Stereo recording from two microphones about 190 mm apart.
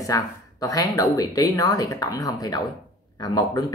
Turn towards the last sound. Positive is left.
turn(degrees=20)  # may be behind; listen again after turning